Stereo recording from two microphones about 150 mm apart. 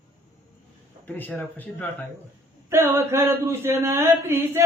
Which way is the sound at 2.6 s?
15° right (ahead or behind).